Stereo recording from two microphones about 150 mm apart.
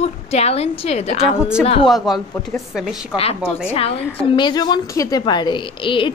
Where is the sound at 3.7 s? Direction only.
40° left (ahead or behind).